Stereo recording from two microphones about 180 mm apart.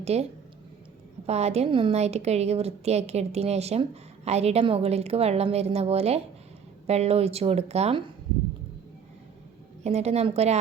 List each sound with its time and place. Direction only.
0.0 s speech: 35° right (ahead or behind)
1.3 s a woman's voice: 35° right (ahead or behind)
9.8 s a woman's voice: 35° right (ahead or behind)